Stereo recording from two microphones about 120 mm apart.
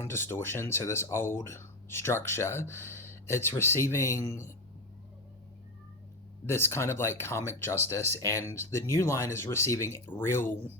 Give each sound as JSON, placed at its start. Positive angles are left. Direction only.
{"t": 0.0, "sound": "speech", "side_deg": 20}
{"t": 6.4, "sound": "speech", "side_deg": 20}